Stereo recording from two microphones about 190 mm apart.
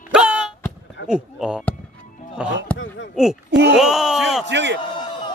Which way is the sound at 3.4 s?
60° right (ahead or behind).